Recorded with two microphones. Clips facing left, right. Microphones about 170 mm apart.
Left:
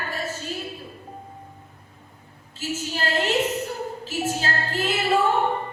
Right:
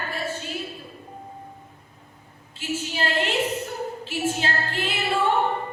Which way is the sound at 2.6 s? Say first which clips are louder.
Even; 40° left (ahead or behind).